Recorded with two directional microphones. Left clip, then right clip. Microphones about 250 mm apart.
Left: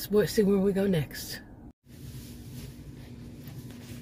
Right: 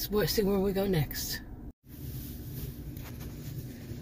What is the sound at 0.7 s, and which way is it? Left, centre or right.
Speech, centre.